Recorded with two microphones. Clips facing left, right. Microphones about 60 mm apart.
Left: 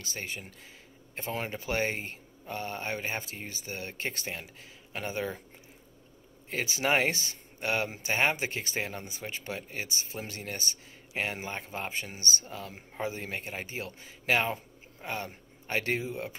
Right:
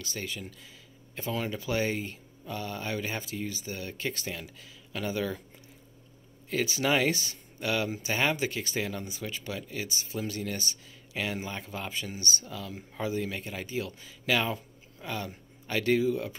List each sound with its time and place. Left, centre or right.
0.0 s speech: left
6.5 s speech: left